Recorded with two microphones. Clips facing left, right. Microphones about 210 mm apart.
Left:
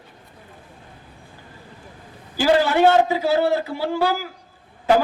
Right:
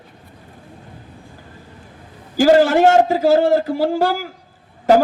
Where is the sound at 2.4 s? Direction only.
45° right (ahead or behind).